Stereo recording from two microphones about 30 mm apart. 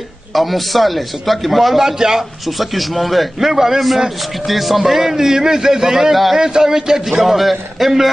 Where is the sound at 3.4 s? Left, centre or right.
Centre.